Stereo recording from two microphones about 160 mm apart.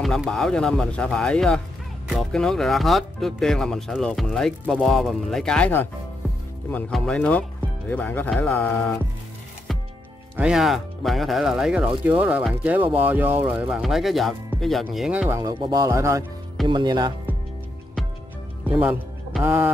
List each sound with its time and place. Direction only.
0.0 s speech: centre (ahead or behind)
10.3 s speech: 5° right (ahead or behind)
15.5 s speech: 25° right (ahead or behind)
19.4 s speech: 15° right (ahead or behind)